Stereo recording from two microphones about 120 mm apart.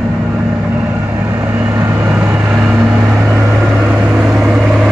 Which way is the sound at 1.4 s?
15° right (ahead or behind).